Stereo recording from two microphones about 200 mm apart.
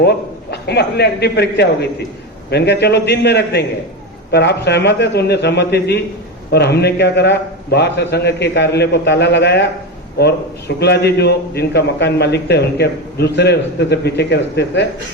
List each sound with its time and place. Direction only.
0.0 s a man's voice: 55° left (ahead or behind)